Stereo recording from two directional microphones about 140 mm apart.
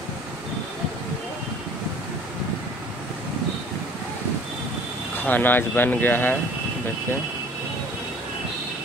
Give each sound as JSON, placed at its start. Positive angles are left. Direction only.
{"t": 5.1, "sound": "speech", "side_deg": 15}